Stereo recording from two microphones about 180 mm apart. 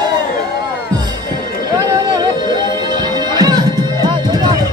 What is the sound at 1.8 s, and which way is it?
Music, 20° right (ahead or behind).